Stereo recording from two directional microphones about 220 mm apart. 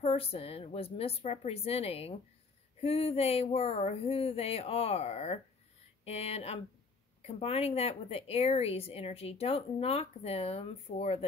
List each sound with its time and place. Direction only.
0.0 s speech: 25° left (ahead or behind)